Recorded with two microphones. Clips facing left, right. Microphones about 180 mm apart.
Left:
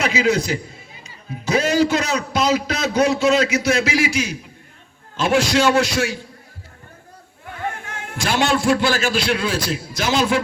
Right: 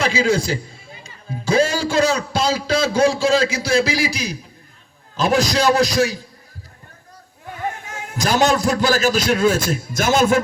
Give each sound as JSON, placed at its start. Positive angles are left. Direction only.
{"t": 0.0, "sound": "a man's voice", "side_deg": -30}
{"t": 8.1, "sound": "a man's voice", "side_deg": -40}